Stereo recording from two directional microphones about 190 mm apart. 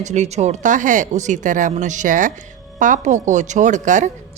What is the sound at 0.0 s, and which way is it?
A woman's voice, 35° right (ahead or behind).